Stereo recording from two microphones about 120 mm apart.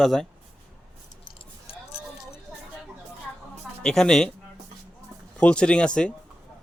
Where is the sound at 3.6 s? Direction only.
5° left (ahead or behind).